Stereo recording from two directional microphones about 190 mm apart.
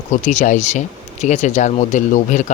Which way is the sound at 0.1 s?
40° left (ahead or behind).